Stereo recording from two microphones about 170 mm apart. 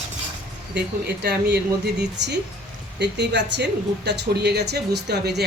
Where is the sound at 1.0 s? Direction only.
75° right (ahead or behind).